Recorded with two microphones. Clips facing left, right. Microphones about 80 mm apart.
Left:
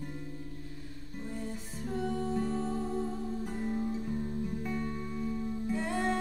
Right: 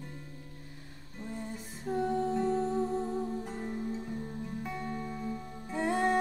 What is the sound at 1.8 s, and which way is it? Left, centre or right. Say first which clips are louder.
Music: right 3 dB; centre.